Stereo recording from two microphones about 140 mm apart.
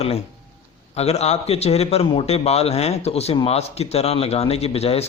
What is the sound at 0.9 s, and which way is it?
Speech, 50° left (ahead or behind).